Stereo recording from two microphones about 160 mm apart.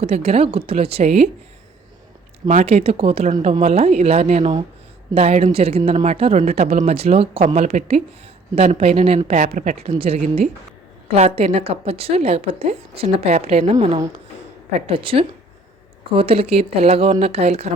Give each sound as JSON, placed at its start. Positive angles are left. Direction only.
{"t": 0.0, "sound": "speech", "side_deg": -40}
{"t": 2.5, "sound": "speech", "side_deg": -45}